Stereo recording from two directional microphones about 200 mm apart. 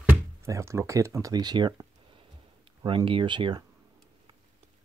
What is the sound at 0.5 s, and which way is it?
Speech, 15° right (ahead or behind).